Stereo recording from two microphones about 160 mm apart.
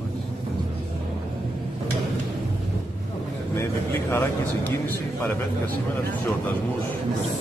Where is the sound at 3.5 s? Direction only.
15° left (ahead or behind).